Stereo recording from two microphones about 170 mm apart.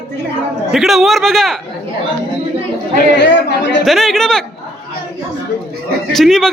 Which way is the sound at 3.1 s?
90° left.